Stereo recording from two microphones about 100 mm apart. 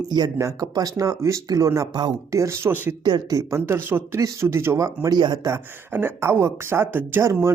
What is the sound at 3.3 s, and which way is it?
Speech, 30° right (ahead or behind).